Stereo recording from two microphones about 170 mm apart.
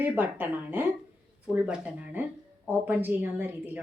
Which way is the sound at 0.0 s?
10° right (ahead or behind).